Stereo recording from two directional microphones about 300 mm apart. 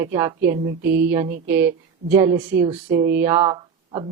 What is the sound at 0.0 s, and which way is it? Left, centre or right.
Speech, centre.